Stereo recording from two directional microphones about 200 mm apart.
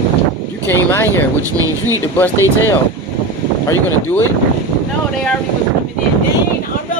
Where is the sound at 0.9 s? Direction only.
10° left (ahead or behind).